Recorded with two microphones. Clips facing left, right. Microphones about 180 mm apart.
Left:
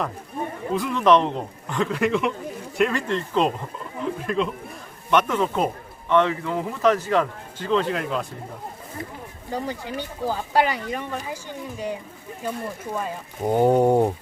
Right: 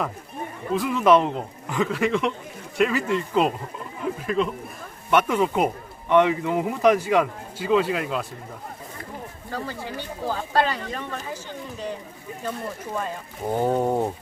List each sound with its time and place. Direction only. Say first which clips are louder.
0.7 s speech: even; centre (ahead or behind)
5.1 s speech: right 1 dB; 10° right (ahead or behind)
9.5 s speech: left 3 dB; 15° left (ahead or behind)
13.5 s a sound: left 5 dB; 20° left (ahead or behind)